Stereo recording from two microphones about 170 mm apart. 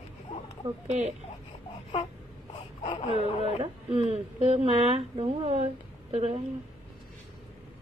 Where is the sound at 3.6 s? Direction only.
35° right (ahead or behind).